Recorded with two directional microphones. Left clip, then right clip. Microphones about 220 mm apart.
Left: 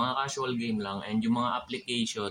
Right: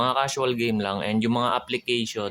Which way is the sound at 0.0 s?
35° right (ahead or behind).